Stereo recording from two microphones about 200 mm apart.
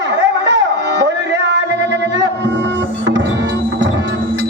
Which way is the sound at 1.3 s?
65° right (ahead or behind).